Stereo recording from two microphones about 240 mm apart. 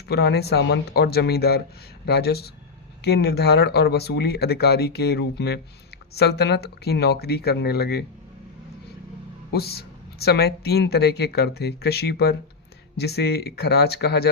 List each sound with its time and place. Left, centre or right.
0.1 s speech: left
9.5 s speech: left